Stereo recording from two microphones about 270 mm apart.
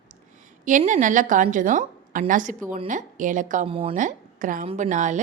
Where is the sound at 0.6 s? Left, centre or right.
Right.